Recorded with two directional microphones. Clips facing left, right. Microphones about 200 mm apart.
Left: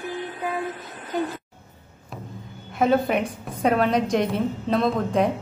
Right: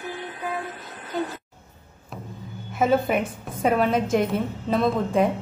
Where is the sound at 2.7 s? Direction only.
5° right (ahead or behind).